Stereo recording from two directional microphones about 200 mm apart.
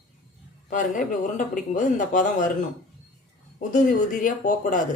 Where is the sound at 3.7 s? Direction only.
40° left (ahead or behind).